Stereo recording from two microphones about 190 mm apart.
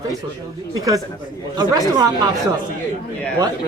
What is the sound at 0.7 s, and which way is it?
Speech, 20° right (ahead or behind).